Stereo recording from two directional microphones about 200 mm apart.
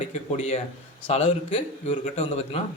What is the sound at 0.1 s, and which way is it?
A man's voice, 35° left (ahead or behind).